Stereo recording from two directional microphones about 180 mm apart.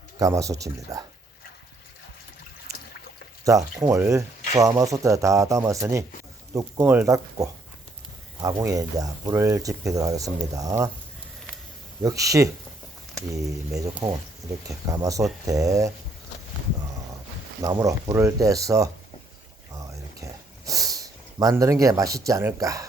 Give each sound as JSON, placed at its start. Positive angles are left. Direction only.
{"t": 0.2, "sound": "speech", "side_deg": -20}
{"t": 3.4, "sound": "speech", "side_deg": -20}
{"t": 12.0, "sound": "speech", "side_deg": -20}
{"t": 17.6, "sound": "speech", "side_deg": -20}
{"t": 19.7, "sound": "a sound", "side_deg": -15}
{"t": 22.3, "sound": "speech", "side_deg": -15}